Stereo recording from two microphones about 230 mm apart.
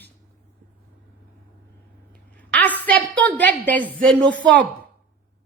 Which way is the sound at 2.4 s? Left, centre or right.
Centre.